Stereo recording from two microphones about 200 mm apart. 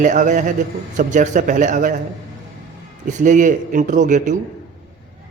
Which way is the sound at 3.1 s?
40° right (ahead or behind).